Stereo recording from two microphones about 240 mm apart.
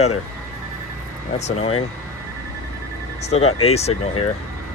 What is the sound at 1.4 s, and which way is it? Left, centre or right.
Speech, left.